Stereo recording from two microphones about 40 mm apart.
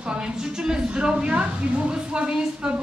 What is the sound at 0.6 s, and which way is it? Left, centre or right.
Speech, right.